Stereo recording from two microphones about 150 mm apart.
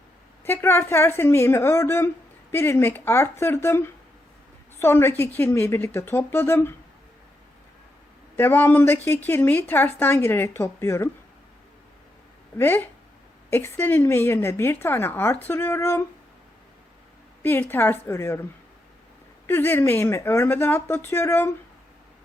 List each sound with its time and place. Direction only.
0.4 s speech: 15° left (ahead or behind)
8.4 s speech: 15° left (ahead or behind)
12.5 s speech: 15° left (ahead or behind)
17.4 s speech: 15° left (ahead or behind)
19.5 s speech: 15° left (ahead or behind)